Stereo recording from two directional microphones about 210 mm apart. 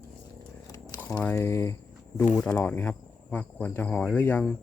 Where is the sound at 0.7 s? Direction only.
10° left (ahead or behind).